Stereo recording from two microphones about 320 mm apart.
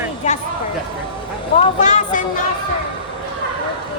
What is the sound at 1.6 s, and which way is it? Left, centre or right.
Speech, left.